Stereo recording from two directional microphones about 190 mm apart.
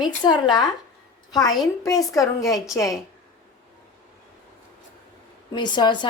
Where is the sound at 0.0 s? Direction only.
20° left (ahead or behind).